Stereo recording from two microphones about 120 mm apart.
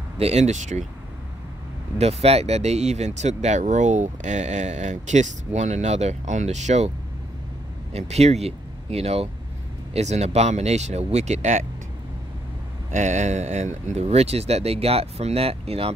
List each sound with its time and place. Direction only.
0.2 s speech: 65° right (ahead or behind)
2.0 s speech: 60° right (ahead or behind)
7.9 s speech: 65° right (ahead or behind)
12.9 s speech: 85° right; by 15.9 s 55° right (ahead or behind)